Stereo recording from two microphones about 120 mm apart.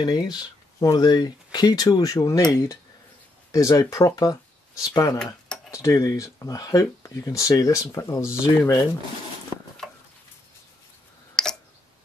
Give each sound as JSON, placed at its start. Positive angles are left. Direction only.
{"t": 0.0, "sound": "speech", "side_deg": 35}
{"t": 11.4, "sound": "tick-tock", "side_deg": 5}